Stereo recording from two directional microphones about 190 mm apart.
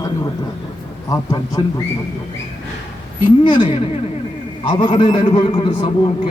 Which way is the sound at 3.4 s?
25° left (ahead or behind).